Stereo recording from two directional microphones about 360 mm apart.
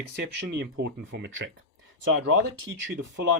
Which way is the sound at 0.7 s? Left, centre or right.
Right.